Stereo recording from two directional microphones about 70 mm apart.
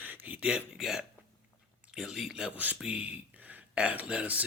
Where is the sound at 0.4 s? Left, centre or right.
Centre.